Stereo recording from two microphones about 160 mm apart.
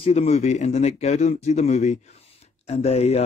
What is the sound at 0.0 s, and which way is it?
Speech, 40° left (ahead or behind).